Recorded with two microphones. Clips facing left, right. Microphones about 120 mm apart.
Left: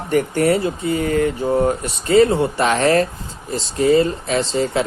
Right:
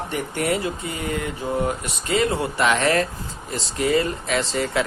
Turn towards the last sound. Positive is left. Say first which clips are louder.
# left 4 dB
turn(degrees=25)  # may be behind; listen again after turning